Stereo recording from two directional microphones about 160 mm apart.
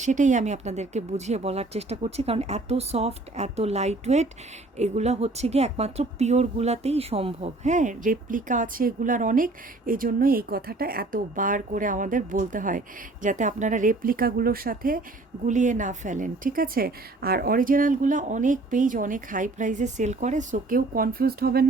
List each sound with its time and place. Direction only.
0.0 s a woman's voice: 50° right (ahead or behind)
15.4 s a woman's voice: 50° right (ahead or behind); by 21.7 s 75° right (ahead or behind)